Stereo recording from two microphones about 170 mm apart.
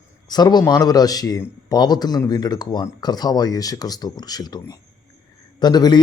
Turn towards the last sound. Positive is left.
turn(degrees=25)  # may be behind; listen again after turning